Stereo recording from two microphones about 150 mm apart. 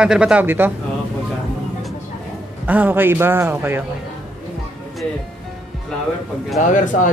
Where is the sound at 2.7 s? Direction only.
10° right (ahead or behind).